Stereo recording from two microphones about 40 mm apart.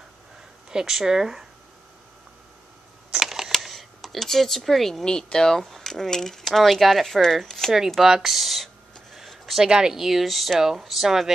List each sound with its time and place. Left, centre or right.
0.7 s speech: centre
3.1 s a sound: centre
3.6 s speech: centre
5.0 s speech: centre
8.0 s speech: centre
9.7 s speech: centre
9.9 s speech: centre